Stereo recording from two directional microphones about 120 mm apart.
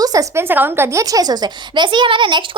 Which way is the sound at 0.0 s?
30° right (ahead or behind).